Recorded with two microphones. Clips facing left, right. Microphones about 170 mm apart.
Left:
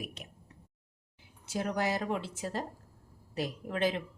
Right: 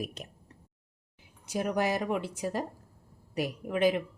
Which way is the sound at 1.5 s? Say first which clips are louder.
Right 3 dB; 15° right (ahead or behind).